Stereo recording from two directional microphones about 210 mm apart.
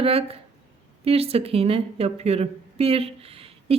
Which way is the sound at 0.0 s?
30° right (ahead or behind).